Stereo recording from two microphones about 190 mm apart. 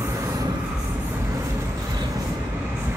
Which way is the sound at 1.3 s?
20° right (ahead or behind).